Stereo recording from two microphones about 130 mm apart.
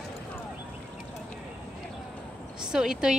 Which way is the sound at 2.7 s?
5° right (ahead or behind).